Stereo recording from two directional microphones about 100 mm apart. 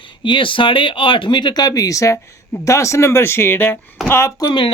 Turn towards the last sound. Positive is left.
turn(degrees=40)  # may be behind; listen again after turning